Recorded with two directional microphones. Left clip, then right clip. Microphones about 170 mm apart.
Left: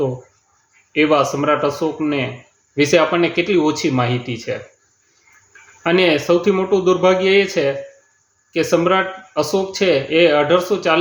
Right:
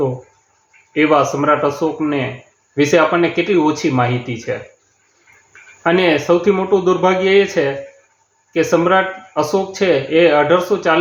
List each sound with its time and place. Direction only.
0.9 s speech: 20° left (ahead or behind)
5.8 s speech: 20° left (ahead or behind)